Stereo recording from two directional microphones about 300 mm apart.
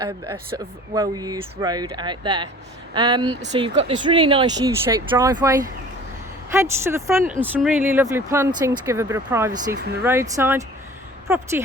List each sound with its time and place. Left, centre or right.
0.0 s speech: centre
9.5 s speech: right
10.0 s speech: centre